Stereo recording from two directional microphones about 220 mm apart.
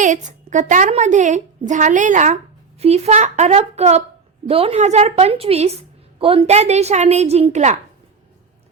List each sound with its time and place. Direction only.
0.0 s a woman's voice: 35° right (ahead or behind)